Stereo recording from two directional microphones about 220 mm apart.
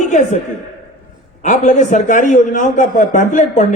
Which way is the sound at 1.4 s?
35° left (ahead or behind).